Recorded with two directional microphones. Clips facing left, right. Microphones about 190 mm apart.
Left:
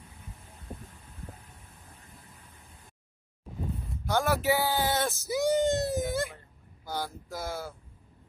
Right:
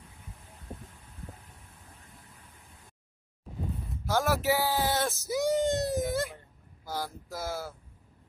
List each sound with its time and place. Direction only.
4.0 s speech: centre (ahead or behind)